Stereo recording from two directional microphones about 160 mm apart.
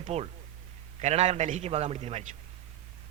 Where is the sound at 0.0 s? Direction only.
40° right (ahead or behind).